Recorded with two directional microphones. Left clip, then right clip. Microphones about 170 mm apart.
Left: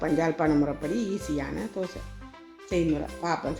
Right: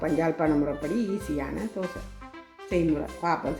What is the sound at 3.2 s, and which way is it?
Speech, 55° left (ahead or behind).